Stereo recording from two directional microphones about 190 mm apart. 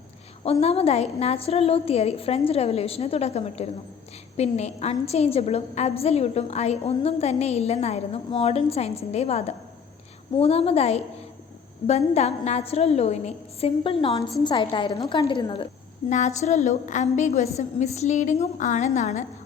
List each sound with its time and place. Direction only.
0.6 s a woman's voice: 30° left (ahead or behind)
16.0 s a woman's voice: 40° left (ahead or behind)